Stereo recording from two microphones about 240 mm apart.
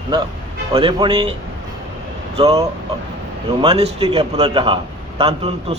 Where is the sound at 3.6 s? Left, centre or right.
Right.